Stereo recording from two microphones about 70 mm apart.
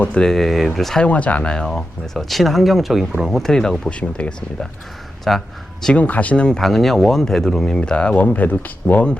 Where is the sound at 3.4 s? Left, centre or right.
Centre.